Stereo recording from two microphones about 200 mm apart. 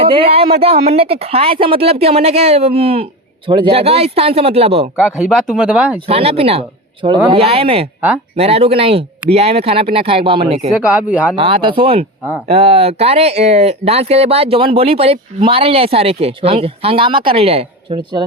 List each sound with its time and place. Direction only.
0.0 s speech: 25° right (ahead or behind)
4.9 s speech: 5° right (ahead or behind)
6.1 s speech: 30° right (ahead or behind)
10.7 s speech: 5° right (ahead or behind)
11.3 s speech: 25° right (ahead or behind)